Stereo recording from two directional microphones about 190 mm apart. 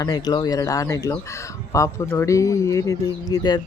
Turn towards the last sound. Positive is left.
turn(degrees=20)  # may be behind; listen again after turning